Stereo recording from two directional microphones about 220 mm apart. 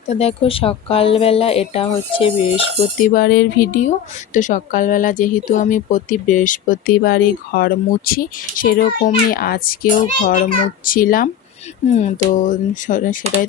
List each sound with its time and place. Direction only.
0.1 s speech: 30° left (ahead or behind)
3.1 s speech: 45° left (ahead or behind)